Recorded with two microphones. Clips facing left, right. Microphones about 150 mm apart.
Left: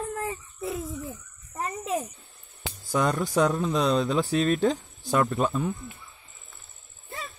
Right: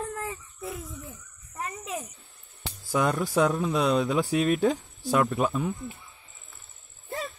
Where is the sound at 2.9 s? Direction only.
5° right (ahead or behind).